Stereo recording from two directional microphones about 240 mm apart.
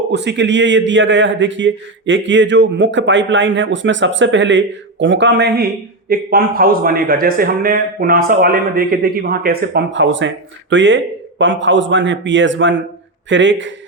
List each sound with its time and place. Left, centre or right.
0.1 s a man's voice: right